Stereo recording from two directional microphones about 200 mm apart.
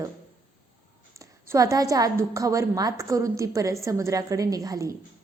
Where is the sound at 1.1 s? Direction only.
15° right (ahead or behind).